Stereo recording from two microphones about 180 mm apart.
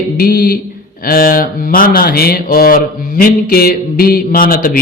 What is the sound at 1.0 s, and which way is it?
Speech, 55° left (ahead or behind).